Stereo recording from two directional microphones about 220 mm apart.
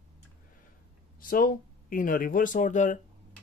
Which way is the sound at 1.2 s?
40° left (ahead or behind).